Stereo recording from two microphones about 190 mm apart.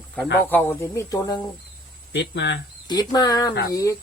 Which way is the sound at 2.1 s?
65° left (ahead or behind).